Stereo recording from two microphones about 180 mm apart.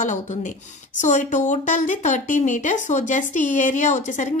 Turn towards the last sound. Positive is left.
turn(degrees=40)  # may be behind; listen again after turning